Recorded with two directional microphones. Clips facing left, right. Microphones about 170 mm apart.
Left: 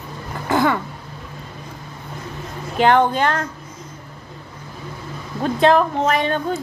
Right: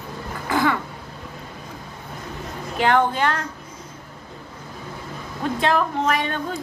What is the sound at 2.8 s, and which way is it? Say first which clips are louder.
Speech: left 4 dB; 35° left (ahead or behind).